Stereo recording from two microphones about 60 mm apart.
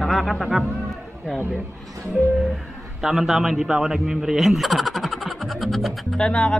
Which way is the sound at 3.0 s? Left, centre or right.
Centre.